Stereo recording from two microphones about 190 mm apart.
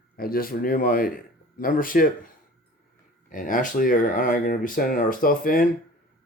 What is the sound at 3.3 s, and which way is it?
Speech, 45° left (ahead or behind).